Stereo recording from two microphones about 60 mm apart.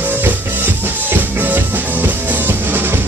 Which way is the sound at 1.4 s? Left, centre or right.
Right.